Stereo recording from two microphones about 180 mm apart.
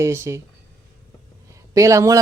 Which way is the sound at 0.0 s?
15° right (ahead or behind).